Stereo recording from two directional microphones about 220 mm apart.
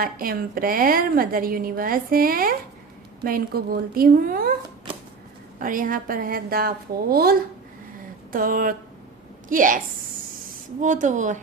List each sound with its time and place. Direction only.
0.0 s a woman's voice: 40° right (ahead or behind)
5.5 s a woman's voice: 40° right (ahead or behind)